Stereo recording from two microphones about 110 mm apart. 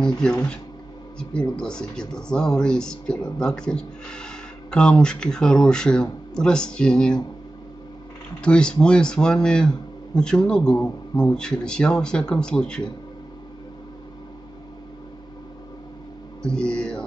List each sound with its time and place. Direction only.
1.3 s speech: 10° left (ahead or behind)
8.4 s speech: 10° left (ahead or behind)
16.4 s speech: 5° left (ahead or behind)